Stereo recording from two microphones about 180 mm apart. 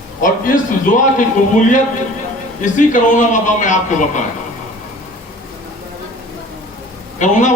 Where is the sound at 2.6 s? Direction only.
45° left (ahead or behind).